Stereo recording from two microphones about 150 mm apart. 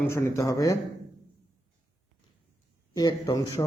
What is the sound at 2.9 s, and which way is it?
Speech, 30° left (ahead or behind).